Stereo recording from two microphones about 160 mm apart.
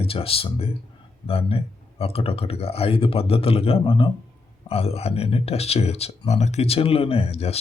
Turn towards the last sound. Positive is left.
turn(degrees=40)  # may be behind; listen again after turning